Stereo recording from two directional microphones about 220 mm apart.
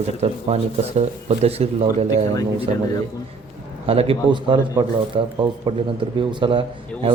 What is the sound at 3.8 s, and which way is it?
Speech, 25° right (ahead or behind).